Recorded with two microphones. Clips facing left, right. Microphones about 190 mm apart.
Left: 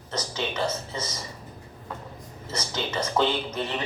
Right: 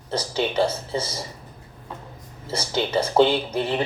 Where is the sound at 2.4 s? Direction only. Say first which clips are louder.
Right 6 dB; 30° right (ahead or behind).